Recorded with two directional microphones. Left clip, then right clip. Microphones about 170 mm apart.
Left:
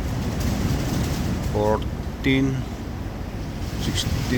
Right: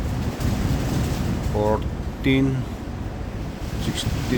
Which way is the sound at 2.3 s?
15° right (ahead or behind).